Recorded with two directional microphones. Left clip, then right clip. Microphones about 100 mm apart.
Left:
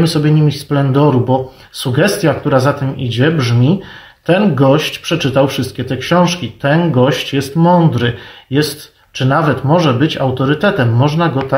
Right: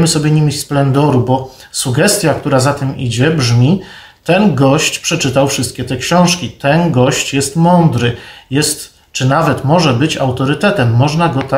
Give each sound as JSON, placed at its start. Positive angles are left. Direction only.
{"t": 0.1, "sound": "speech", "side_deg": -25}
{"t": 9.1, "sound": "speech", "side_deg": -20}